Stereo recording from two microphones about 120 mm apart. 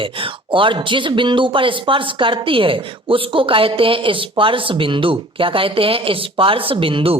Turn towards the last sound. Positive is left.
turn(degrees=-50)  # may be behind; listen again after turning